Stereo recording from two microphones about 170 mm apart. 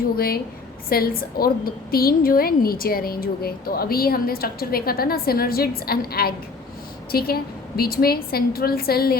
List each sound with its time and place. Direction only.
0.2 s a woman's voice: 60° left (ahead or behind)